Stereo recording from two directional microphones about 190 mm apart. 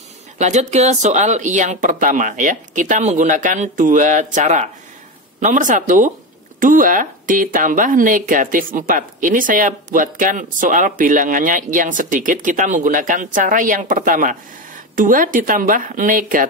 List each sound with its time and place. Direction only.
0.4 s speech: 40° right (ahead or behind)